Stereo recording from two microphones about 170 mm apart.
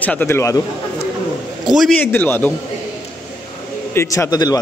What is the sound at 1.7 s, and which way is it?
Speech, centre (ahead or behind).